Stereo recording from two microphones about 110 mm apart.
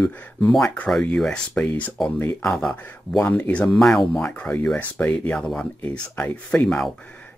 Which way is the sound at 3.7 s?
Centre (ahead or behind).